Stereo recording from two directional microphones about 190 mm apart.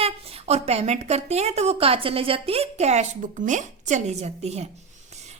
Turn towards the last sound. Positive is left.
turn(degrees=-35)  # may be behind; listen again after turning